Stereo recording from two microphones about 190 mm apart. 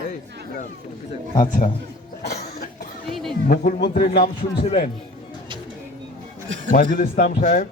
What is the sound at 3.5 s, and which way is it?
Speech, 50° left (ahead or behind).